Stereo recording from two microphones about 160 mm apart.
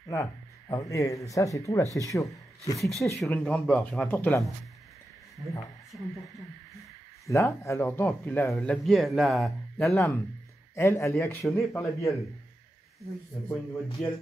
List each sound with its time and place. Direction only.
0.1 s speech: 20° left (ahead or behind)
2.8 s speech: centre (ahead or behind)
5.9 s speech: 5° right (ahead or behind)
7.2 s speech: 20° left (ahead or behind)
8.5 s speech: centre (ahead or behind)
10.7 s speech: 20° left (ahead or behind)
14.0 s speech: 5° left (ahead or behind)